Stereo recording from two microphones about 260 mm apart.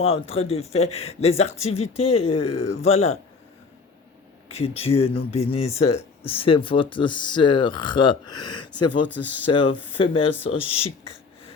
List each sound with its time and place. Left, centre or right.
0.0 s speech: left
4.4 s speech: left
8.5 s speech: left
9.5 s speech: centre